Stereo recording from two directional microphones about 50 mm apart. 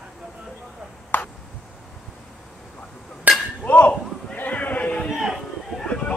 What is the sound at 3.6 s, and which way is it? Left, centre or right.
Chink, left.